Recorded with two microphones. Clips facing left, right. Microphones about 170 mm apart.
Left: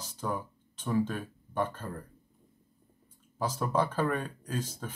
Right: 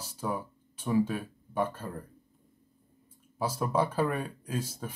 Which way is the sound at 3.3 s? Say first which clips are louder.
Right 1 dB; 10° right (ahead or behind).